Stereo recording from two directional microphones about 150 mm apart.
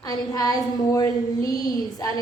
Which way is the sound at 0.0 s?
25° left (ahead or behind).